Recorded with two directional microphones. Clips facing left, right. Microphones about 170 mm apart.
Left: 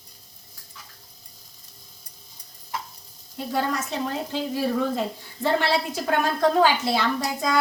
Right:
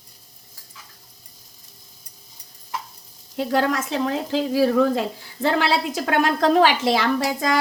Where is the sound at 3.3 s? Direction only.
80° right.